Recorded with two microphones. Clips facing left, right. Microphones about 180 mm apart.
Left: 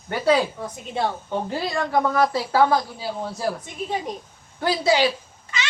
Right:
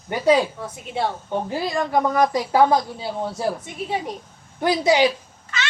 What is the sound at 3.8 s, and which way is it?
Speech, 5° right (ahead or behind).